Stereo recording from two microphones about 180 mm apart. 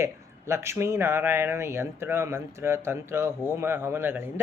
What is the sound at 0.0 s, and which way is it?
Speech, 15° right (ahead or behind).